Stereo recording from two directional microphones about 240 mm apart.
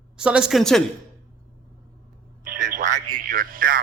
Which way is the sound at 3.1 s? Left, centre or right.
Right.